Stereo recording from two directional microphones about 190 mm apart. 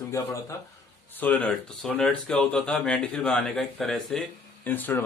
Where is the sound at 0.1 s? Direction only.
15° left (ahead or behind).